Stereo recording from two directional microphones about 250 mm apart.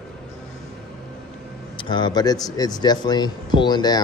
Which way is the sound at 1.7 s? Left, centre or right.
Centre.